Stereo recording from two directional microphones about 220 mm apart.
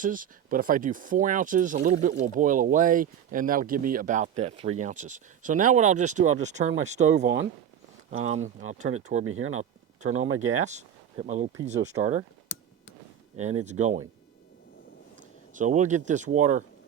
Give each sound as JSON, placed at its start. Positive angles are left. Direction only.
{"t": 0.0, "sound": "speech", "side_deg": -40}
{"t": 9.2, "sound": "speech", "side_deg": -70}
{"t": 10.6, "sound": "speech", "side_deg": -30}
{"t": 13.4, "sound": "speech", "side_deg": -30}
{"t": 15.5, "sound": "speech", "side_deg": -35}